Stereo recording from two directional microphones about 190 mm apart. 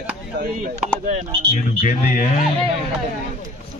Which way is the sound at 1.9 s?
45° left (ahead or behind).